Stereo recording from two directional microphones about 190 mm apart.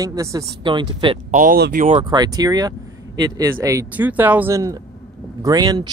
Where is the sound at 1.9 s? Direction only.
25° right (ahead or behind).